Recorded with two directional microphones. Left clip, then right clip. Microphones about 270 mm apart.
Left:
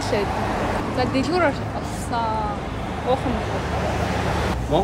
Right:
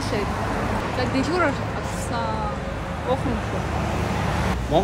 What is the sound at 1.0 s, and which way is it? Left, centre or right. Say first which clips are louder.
Speech: left 2 dB; centre.